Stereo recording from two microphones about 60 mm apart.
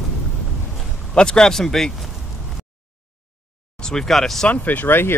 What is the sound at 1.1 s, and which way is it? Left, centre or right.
Speech, centre.